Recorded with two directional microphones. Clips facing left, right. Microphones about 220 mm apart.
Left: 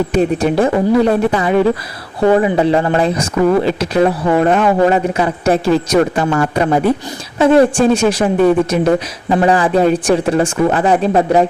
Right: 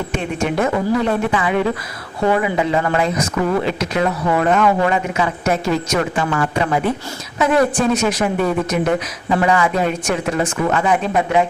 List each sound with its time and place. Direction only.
0.1 s speech: 35° left (ahead or behind)